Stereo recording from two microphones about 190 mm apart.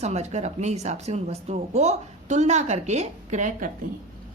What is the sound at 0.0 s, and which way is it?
Speech, 35° right (ahead or behind).